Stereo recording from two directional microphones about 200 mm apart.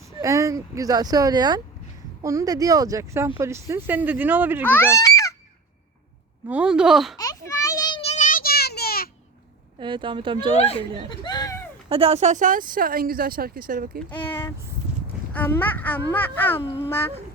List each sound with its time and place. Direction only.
0.2 s speech: 15° right (ahead or behind)
4.6 s a child's voice: 10° left (ahead or behind)
6.5 s speech: 5° right (ahead or behind)
7.2 s children playing: 15° left (ahead or behind); by 9.0 s 50° left (ahead or behind)
9.7 s speech: 25° right (ahead or behind)
10.6 s speech: 30° left (ahead or behind)
11.1 s a sound: 20° left (ahead or behind)
11.9 s speech: 30° right (ahead or behind); by 14.0 s 45° right (ahead or behind)
14.3 s speech: 10° left (ahead or behind)